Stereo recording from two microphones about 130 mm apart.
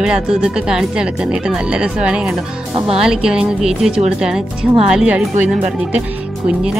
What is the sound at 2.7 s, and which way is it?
Speech, 50° right (ahead or behind).